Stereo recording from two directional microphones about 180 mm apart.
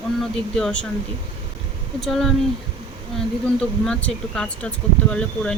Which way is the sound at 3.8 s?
5° left (ahead or behind).